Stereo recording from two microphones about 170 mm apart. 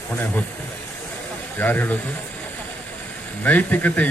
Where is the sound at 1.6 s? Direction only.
10° left (ahead or behind).